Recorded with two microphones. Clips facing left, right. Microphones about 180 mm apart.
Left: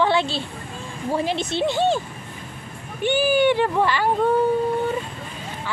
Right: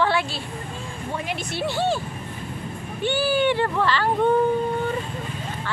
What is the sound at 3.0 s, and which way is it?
Speech, 15° left (ahead or behind).